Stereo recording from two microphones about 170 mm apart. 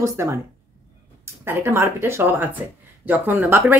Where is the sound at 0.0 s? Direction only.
20° right (ahead or behind).